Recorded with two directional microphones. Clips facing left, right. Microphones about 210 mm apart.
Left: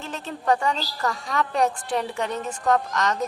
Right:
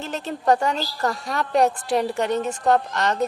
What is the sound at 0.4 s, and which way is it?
A woman's voice, 40° right (ahead or behind).